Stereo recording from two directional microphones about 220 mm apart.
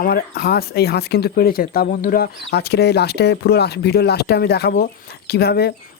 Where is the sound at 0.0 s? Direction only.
45° left (ahead or behind).